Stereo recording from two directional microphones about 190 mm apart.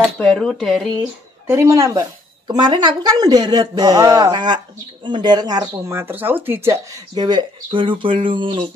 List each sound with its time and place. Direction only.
0.2 s speech: 5° left (ahead or behind)
1.5 s speech: 15° right (ahead or behind)